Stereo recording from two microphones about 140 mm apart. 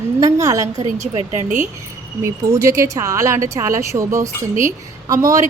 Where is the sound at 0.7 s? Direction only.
55° right (ahead or behind).